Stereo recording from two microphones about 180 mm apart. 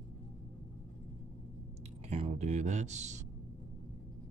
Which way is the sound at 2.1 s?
35° right (ahead or behind).